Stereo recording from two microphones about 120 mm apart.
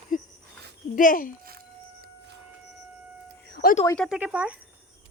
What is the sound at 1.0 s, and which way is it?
Speech, 90° left.